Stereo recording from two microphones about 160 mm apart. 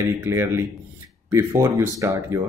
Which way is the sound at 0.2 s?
15° right (ahead or behind).